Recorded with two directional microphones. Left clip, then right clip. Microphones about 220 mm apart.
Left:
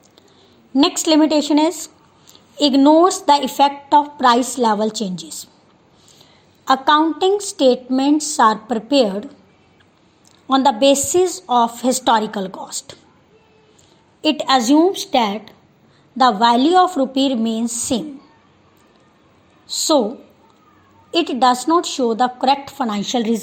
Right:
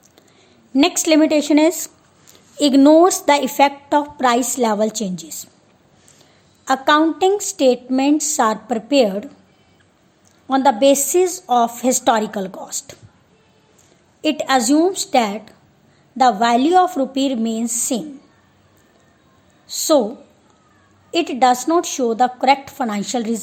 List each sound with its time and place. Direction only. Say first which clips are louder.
0.7 s a woman's voice: even; 15° right (ahead or behind)
6.7 s a woman's voice: left 1 dB; 15° right (ahead or behind)
10.9 s a woman's voice: even; 10° right (ahead or behind)
14.2 s a woman's voice: left 1 dB; 15° right (ahead or behind)
19.6 s a woman's voice: right 1 dB; 10° right (ahead or behind)
21.2 s a woman's voice: even; 15° right (ahead or behind)